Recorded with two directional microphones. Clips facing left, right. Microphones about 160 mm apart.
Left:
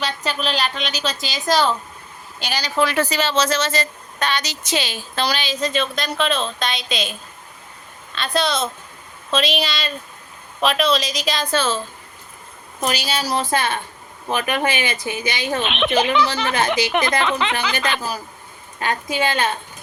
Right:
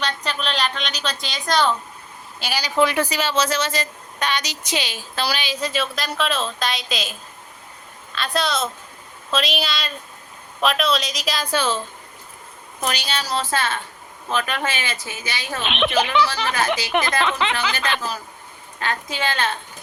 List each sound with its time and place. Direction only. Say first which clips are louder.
0.0 s a woman's voice: left 2 dB; 5° left (ahead or behind)
2.4 s a woman's voice: right 1 dB; 10° right (ahead or behind)
12.8 s speech: left 3 dB; 5° left (ahead or behind)
15.6 s a woman's voice: even; centre (ahead or behind)
17.7 s speech: left 2 dB; 10° left (ahead or behind)